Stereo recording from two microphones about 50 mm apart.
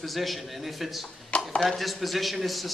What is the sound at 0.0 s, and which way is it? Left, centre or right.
A man's voice, centre.